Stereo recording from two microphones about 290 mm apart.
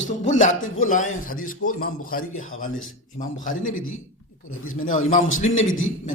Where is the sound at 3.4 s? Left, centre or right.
Left.